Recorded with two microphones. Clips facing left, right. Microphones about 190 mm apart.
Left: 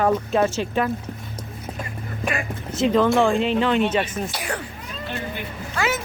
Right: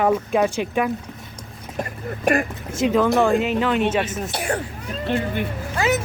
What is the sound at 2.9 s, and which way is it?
Speech, 5° right (ahead or behind).